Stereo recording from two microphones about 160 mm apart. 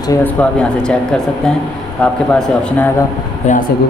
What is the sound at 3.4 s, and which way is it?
Speech, 50° left (ahead or behind).